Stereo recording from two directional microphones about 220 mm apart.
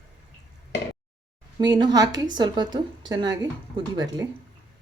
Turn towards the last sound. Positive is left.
turn(degrees=-15)  # may be behind; listen again after turning